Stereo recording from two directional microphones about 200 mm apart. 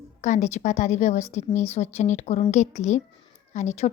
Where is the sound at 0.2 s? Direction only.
35° left (ahead or behind).